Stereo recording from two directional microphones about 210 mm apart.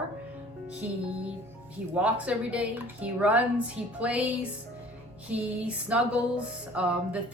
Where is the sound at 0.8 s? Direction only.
5° right (ahead or behind).